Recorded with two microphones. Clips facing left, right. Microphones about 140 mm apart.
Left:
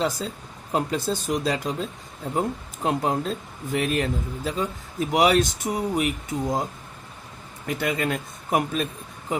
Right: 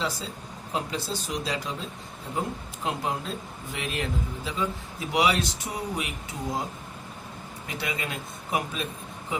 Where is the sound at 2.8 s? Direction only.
45° left (ahead or behind).